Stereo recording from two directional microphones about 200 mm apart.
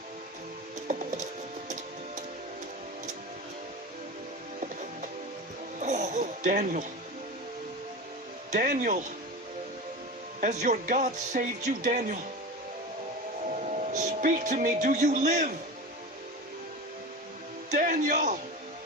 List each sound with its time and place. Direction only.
0.9 s music: 35° right (ahead or behind)
5.8 s a sound: 35° right (ahead or behind)
8.5 s speech: 40° right (ahead or behind)
10.4 s speech: 35° right (ahead or behind)
13.5 s speech: 35° right (ahead or behind)
17.7 s music: 40° right (ahead or behind)